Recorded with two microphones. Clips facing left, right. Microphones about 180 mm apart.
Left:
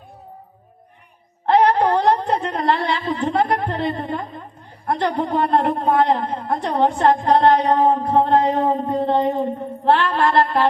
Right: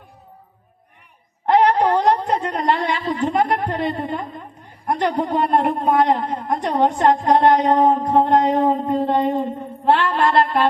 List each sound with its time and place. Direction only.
1.5 s a woman's voice: 15° right (ahead or behind)